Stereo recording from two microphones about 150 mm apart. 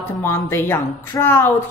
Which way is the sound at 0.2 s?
15° left (ahead or behind).